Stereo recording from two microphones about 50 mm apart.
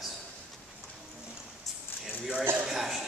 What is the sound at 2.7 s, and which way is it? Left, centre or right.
Speech, centre.